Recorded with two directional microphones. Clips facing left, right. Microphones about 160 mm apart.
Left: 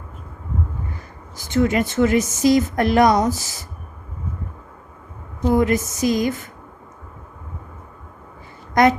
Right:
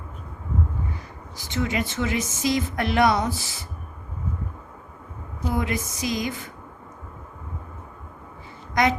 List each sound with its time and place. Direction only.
1.4 s speech: 50° left (ahead or behind)
5.4 s speech: 45° left (ahead or behind)
8.7 s a sound: 50° left (ahead or behind)